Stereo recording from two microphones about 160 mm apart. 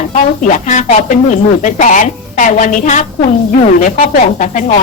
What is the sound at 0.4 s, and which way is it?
Speech, 50° left (ahead or behind).